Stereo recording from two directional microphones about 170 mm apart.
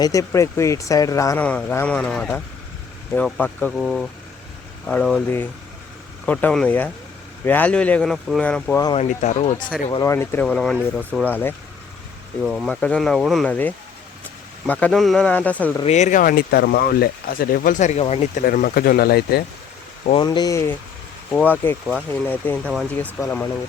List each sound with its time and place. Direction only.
0.0 s speech: 20° left (ahead or behind)
1.5 s speech: 10° left (ahead or behind)
6.2 s speech: 10° left (ahead or behind)
9.0 s speech: 45° left (ahead or behind)
9.9 s speech: 20° left (ahead or behind)
10.4 s speech: 5° left (ahead or behind)
12.4 s speech: 5° left (ahead or behind)
15.8 s speech: 40° left (ahead or behind)
18.4 s speech: 55° left (ahead or behind)
20.1 s speech: 25° left (ahead or behind)